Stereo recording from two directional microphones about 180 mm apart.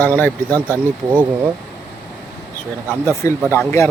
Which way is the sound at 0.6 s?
15° right (ahead or behind).